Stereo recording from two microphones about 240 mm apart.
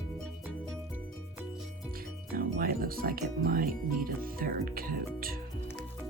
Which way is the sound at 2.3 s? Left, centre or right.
Right.